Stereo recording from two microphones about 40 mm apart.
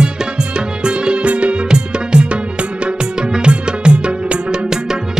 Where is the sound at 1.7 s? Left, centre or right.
Right.